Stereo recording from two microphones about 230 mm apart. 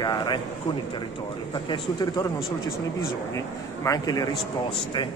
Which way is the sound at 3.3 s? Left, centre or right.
Centre.